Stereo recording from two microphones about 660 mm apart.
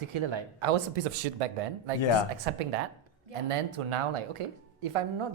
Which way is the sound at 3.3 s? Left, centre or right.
Right.